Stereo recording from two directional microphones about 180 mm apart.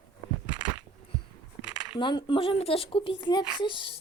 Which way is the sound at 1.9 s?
25° left (ahead or behind).